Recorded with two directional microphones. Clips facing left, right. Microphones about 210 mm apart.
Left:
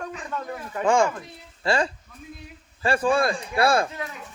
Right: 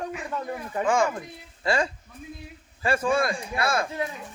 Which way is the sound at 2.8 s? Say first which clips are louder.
Left 2 dB; 30° left (ahead or behind).